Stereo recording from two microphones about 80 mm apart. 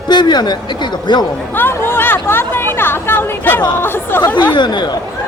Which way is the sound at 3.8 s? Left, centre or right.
Left.